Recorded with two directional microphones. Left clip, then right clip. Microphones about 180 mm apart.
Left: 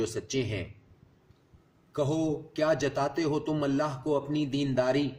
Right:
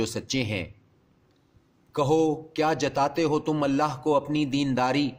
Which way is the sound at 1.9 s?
45° right (ahead or behind).